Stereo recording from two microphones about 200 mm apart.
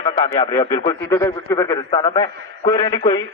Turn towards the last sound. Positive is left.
turn(degrees=25)  # may be behind; listen again after turning